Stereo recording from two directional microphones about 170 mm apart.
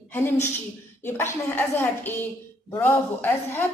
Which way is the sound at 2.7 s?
10° left (ahead or behind).